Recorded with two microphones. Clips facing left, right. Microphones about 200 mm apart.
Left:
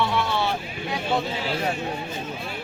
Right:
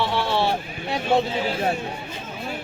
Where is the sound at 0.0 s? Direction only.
30° right (ahead or behind).